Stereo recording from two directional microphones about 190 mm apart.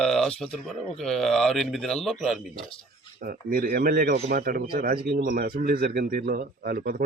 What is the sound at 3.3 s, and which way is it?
Speech, 50° right (ahead or behind).